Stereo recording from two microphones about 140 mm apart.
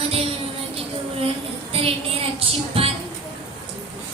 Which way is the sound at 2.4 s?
45° right (ahead or behind).